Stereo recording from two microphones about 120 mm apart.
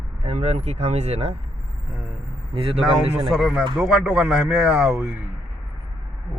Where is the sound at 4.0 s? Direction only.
10° right (ahead or behind).